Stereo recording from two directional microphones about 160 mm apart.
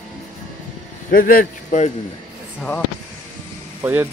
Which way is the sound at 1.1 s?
60° left (ahead or behind).